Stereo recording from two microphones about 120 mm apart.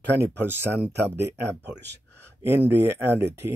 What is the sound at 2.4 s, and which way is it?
Speech, 20° right (ahead or behind).